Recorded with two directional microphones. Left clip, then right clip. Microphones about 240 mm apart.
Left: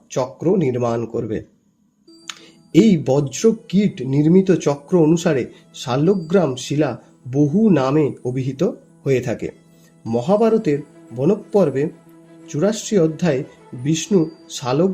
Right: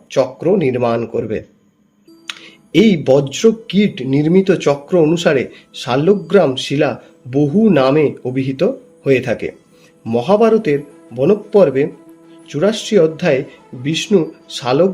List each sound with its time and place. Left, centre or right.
0.1 s speech: left
2.7 s speech: left